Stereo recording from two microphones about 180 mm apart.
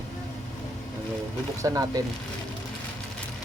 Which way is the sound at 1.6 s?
20° right (ahead or behind).